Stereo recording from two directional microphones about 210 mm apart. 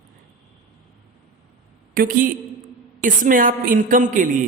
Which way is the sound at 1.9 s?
40° right (ahead or behind).